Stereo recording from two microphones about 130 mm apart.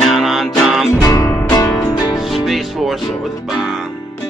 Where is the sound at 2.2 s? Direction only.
Centre (ahead or behind).